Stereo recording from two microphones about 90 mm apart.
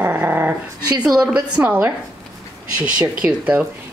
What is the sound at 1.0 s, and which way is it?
Speech, 10° right (ahead or behind).